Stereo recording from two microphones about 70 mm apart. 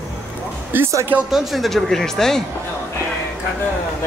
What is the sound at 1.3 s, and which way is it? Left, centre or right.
Speech, centre.